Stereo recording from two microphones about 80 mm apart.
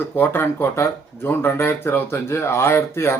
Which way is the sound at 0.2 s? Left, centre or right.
Left.